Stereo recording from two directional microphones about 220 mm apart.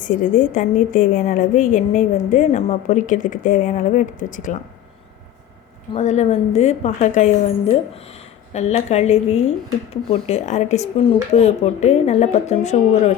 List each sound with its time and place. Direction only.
0.0 s a woman's voice: 35° left (ahead or behind)
5.9 s a woman's voice: 30° left (ahead or behind)